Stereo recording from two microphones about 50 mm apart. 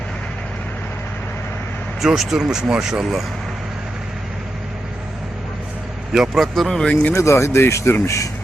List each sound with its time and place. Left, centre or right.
2.0 s speech: centre
6.3 s speech: centre
7.1 s speech: left
8.0 s speech: left